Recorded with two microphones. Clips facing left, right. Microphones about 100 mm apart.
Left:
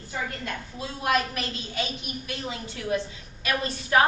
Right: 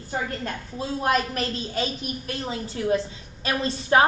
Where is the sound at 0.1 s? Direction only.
35° right (ahead or behind).